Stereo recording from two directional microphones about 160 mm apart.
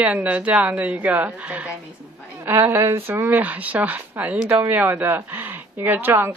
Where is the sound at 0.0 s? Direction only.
10° right (ahead or behind).